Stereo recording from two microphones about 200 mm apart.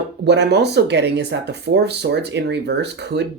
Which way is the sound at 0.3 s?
60° right (ahead or behind).